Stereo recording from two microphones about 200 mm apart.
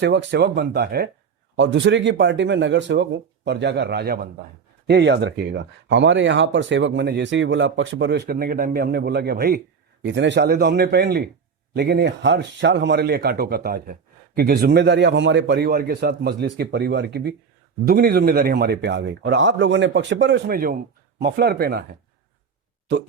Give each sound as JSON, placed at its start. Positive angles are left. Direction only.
{"t": 0.0, "sound": "speech", "side_deg": -60}
{"t": 10.0, "sound": "speech", "side_deg": -65}